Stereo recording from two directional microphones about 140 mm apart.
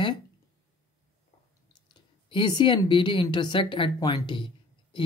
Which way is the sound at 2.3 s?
35° left (ahead or behind).